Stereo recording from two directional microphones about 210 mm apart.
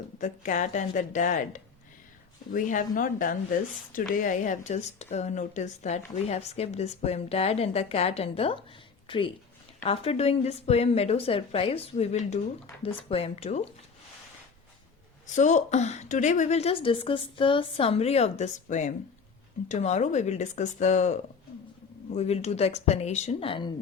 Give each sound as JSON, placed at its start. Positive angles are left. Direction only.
{"t": 0.2, "sound": "a woman's voice", "side_deg": 35}
{"t": 15.4, "sound": "speech", "side_deg": 35}